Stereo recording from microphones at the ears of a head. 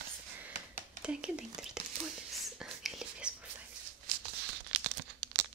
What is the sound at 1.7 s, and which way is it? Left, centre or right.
Whispering, right.